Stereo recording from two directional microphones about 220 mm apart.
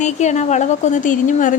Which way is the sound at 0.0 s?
35° left (ahead or behind).